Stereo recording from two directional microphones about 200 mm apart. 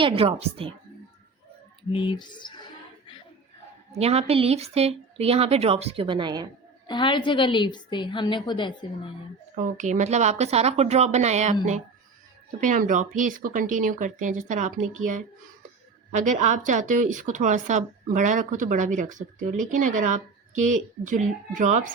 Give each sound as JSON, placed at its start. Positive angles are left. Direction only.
{"t": 0.0, "sound": "a woman's voice", "side_deg": -30}
{"t": 1.9, "sound": "a woman's voice", "side_deg": 25}
{"t": 3.9, "sound": "speech", "side_deg": -30}
{"t": 6.8, "sound": "a woman's voice", "side_deg": 25}
{"t": 9.6, "sound": "speech", "side_deg": -40}
{"t": 12.5, "sound": "speech", "side_deg": -40}
{"t": 16.1, "sound": "speech", "side_deg": -40}